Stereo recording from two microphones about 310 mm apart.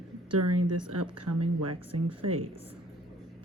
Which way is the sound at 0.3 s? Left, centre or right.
Right.